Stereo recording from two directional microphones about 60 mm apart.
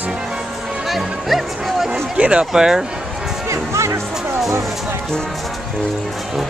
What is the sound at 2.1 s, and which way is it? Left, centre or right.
Speech, centre.